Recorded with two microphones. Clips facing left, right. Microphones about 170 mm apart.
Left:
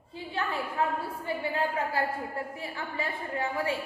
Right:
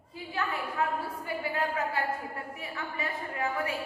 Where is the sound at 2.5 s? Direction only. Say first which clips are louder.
Left 2 dB; 30° left (ahead or behind).